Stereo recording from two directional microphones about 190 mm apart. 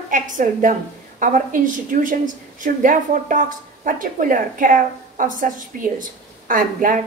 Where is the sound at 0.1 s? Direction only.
45° right (ahead or behind).